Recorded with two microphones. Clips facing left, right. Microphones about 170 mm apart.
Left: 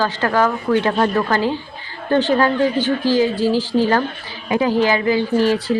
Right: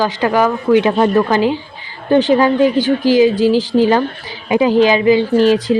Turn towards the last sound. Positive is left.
turn(degrees=-20)  # may be behind; listen again after turning